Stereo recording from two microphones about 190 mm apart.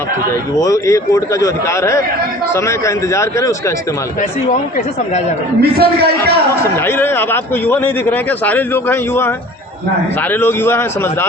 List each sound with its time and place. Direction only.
0.6 s a man's voice: 15° left (ahead or behind)
5.5 s a man's voice: 55° right (ahead or behind)
6.7 s a man's voice: 10° left (ahead or behind)
10.4 s a man's voice: 10° left (ahead or behind)